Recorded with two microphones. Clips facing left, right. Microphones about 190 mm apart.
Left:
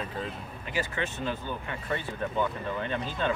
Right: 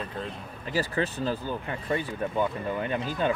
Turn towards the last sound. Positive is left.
turn(degrees=-15)  # may be behind; listen again after turning